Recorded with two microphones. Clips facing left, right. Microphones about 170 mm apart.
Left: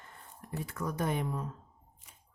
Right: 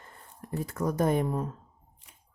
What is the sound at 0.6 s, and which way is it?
Speech, 40° right (ahead or behind).